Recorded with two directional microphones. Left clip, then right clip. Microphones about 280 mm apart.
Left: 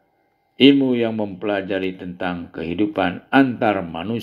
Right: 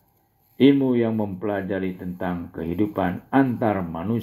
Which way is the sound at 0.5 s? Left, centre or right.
Left.